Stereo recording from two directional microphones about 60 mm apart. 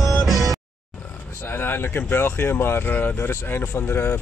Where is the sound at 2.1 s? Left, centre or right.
Left.